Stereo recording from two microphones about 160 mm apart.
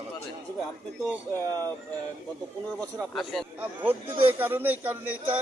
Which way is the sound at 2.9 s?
20° right (ahead or behind).